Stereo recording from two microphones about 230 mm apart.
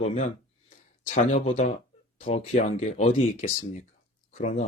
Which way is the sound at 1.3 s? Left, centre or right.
Left.